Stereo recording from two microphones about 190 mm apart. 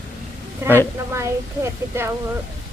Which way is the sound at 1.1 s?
15° right (ahead or behind).